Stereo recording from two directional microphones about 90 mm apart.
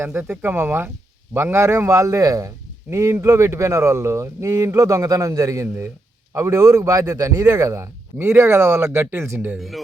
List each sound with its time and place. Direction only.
0.0 s a man's voice: 25° right (ahead or behind)
9.6 s speech: centre (ahead or behind)